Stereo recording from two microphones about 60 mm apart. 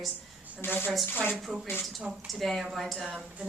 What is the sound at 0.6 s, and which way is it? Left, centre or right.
Speech, left.